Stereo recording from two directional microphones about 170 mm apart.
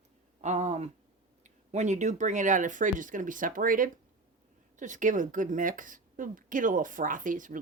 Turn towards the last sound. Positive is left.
turn(degrees=-50)  # may be behind; listen again after turning